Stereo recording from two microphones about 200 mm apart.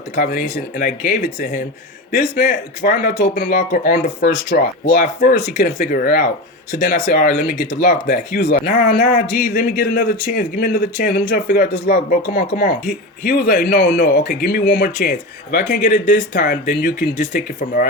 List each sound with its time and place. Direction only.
0.2 s a man's voice: 45° left (ahead or behind)
13.7 s a man's voice: 60° left (ahead or behind)
15.5 s a man's voice: 40° left (ahead or behind)
16.3 s a man's voice: 55° left (ahead or behind)